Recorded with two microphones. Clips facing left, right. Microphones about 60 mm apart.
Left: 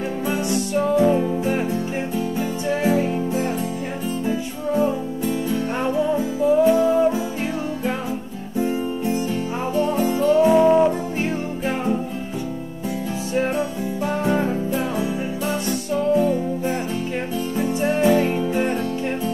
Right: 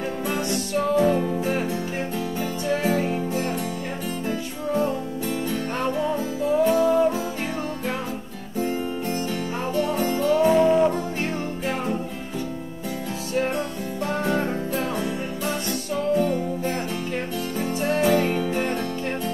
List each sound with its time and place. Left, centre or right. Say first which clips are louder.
0.3 s music: left 4 dB; centre
4.3 s music: left 2 dB; centre
8.5 s music: left 3 dB; centre
13.3 s music: left 3 dB; centre